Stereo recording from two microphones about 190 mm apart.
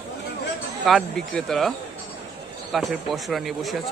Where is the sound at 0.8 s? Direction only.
Centre (ahead or behind).